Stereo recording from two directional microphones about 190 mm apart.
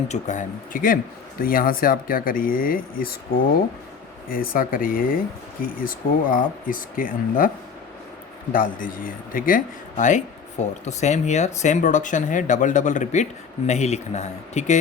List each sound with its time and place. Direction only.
0.1 s speech: 40° left (ahead or behind)
8.5 s a man's voice: 45° left (ahead or behind)